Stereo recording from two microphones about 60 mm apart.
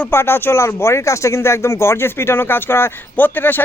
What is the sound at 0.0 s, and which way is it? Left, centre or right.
Speech, left.